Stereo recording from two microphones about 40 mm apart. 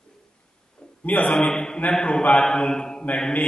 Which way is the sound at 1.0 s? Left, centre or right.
Left.